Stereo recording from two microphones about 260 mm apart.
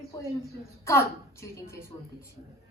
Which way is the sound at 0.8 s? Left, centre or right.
Centre.